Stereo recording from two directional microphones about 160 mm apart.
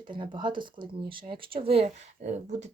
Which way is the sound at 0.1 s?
30° right (ahead or behind).